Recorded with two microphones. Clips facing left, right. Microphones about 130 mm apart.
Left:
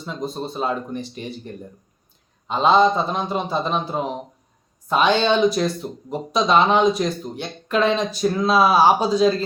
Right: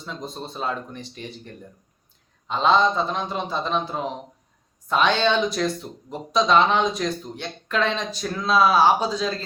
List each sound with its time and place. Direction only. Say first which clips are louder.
0.0 s speech: left 6 dB; 5° left (ahead or behind)